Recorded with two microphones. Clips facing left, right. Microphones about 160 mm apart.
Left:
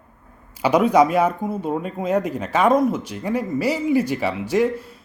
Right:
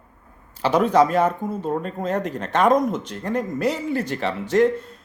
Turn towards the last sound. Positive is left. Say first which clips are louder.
# right 2 dB
turn(degrees=10)  # may be behind; listen again after turning